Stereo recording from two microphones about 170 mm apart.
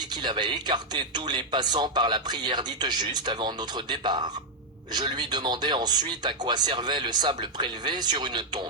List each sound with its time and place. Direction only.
0.2 s speech: 25° right (ahead or behind)